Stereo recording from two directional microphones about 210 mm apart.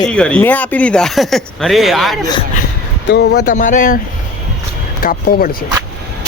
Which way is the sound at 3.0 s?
55° left (ahead or behind).